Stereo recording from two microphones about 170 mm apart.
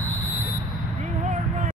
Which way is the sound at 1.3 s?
40° right (ahead or behind).